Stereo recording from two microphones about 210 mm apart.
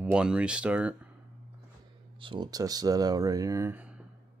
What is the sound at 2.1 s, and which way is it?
Speech, 25° right (ahead or behind).